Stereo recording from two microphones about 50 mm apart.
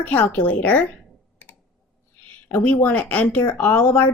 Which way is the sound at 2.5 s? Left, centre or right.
Left.